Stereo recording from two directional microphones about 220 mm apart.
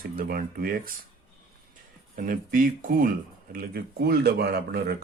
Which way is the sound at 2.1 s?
40° right (ahead or behind).